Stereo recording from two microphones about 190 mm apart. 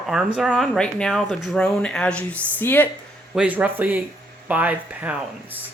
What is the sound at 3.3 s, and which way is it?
Speech, 5° right (ahead or behind).